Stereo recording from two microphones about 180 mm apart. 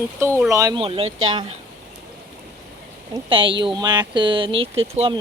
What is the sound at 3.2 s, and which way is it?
Speech, 30° right (ahead or behind).